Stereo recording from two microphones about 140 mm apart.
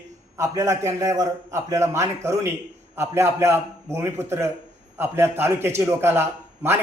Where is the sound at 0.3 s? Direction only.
25° right (ahead or behind).